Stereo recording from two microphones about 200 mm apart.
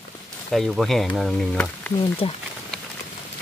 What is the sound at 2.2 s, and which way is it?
Speech, 30° left (ahead or behind).